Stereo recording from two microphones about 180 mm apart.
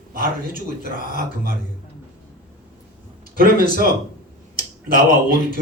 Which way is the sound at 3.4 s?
55° right (ahead or behind).